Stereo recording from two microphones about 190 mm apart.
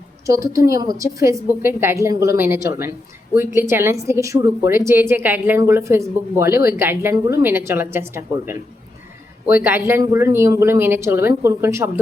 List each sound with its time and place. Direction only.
0.5 s a woman's voice: 15° right (ahead or behind)
9.6 s a woman's voice: 10° right (ahead or behind)